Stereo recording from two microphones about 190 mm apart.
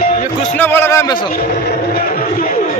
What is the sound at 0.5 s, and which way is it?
Speech, 10° left (ahead or behind).